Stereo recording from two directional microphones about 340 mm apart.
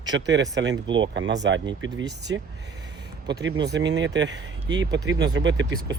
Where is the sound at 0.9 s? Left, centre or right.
Centre.